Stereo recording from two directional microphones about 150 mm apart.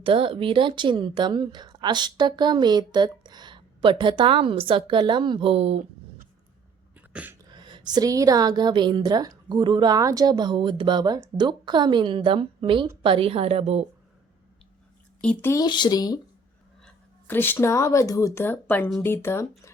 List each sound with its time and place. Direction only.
0.0 s speech: 35° right (ahead or behind)
6.9 s throat clearing: 10° right (ahead or behind)
7.5 s a woman's voice: 30° right (ahead or behind)
15.2 s speech: 10° left (ahead or behind)
15.6 s speech: 30° left (ahead or behind)
16.8 s speech: 15° left (ahead or behind)